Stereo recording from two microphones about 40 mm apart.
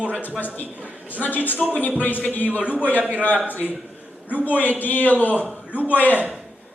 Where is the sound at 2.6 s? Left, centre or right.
Right.